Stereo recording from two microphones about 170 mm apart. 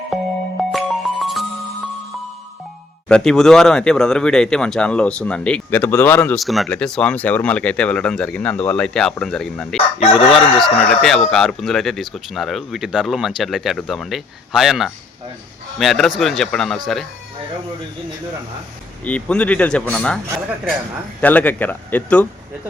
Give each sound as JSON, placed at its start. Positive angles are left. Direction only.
{"t": 0.7, "sound": "music", "side_deg": 0}
{"t": 3.1, "sound": "speech", "side_deg": 5}
{"t": 10.1, "sound": "crowing", "side_deg": 35}
{"t": 10.3, "sound": "speech", "side_deg": 5}
{"t": 19.0, "sound": "speech", "side_deg": 5}
{"t": 21.2, "sound": "speech", "side_deg": 10}